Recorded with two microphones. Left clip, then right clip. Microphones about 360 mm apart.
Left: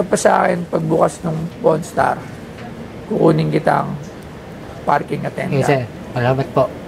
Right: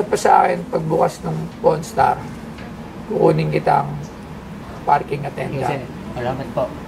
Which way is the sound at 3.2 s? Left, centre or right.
Left.